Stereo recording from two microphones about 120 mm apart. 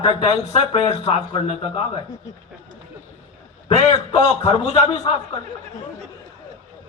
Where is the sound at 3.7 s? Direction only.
55° left (ahead or behind).